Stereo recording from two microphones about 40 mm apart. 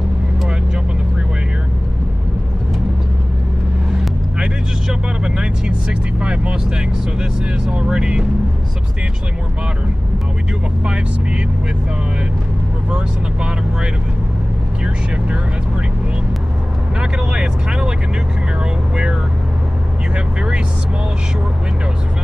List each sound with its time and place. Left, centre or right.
4.8 s vehicle: centre
7.2 s speech: centre
17.0 s speech: right